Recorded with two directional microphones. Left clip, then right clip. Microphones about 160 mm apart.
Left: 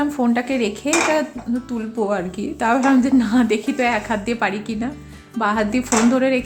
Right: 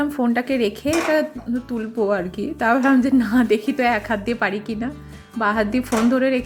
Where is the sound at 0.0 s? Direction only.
20° right (ahead or behind).